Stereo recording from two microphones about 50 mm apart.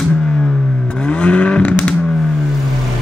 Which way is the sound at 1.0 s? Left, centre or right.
Left.